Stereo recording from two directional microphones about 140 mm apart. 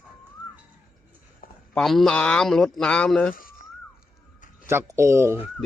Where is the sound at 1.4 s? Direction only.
90° left.